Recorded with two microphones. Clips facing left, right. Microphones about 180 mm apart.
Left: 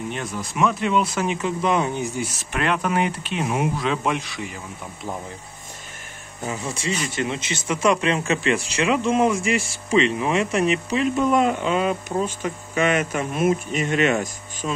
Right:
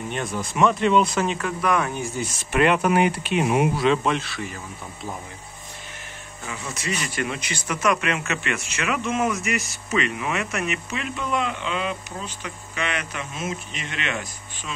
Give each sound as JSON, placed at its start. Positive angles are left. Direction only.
{"t": 0.1, "sound": "speech", "side_deg": 0}
{"t": 2.5, "sound": "speech", "side_deg": -5}
{"t": 4.0, "sound": "speech", "side_deg": 15}
{"t": 6.6, "sound": "speech", "side_deg": 30}